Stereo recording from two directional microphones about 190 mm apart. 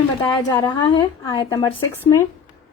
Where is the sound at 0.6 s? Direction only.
20° left (ahead or behind).